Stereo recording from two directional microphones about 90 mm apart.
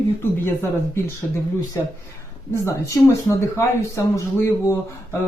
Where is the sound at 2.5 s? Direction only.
30° left (ahead or behind).